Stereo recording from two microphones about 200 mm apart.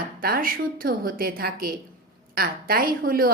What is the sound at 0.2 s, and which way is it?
A woman's voice, 45° right (ahead or behind).